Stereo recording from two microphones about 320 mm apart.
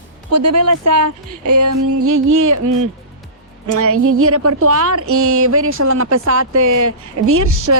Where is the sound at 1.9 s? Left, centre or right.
Right.